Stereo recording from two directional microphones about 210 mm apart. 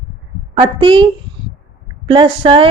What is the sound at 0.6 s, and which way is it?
A woman's voice, 25° right (ahead or behind).